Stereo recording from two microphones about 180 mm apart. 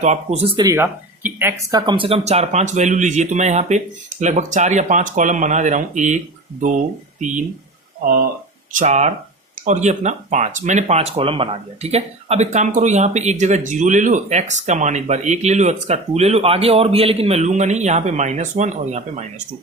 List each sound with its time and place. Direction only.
0.0 s speech: 40° right (ahead or behind)
0.6 s speech: 15° right (ahead or behind)
1.9 s speech: 30° right (ahead or behind)
8.7 s speech: 40° right (ahead or behind)